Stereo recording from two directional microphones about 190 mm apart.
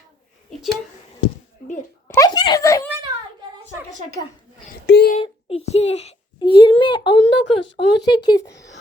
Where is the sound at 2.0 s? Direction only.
20° left (ahead or behind).